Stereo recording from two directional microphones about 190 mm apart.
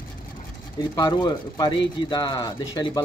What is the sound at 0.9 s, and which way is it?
Speech, 20° left (ahead or behind).